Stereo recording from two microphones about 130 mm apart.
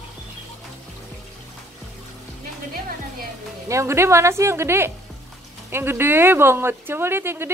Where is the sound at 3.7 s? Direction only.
20° right (ahead or behind).